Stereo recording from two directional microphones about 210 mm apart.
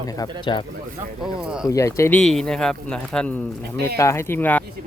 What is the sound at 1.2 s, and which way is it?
Speech, 5° right (ahead or behind).